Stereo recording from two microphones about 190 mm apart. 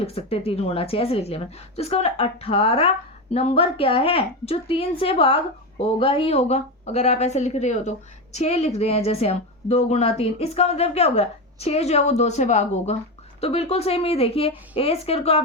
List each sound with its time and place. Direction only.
0.0 s a woman's voice: 30° left (ahead or behind)